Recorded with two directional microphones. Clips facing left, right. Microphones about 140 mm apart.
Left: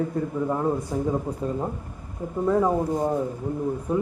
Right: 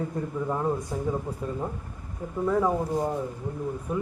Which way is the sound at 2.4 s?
15° left (ahead or behind).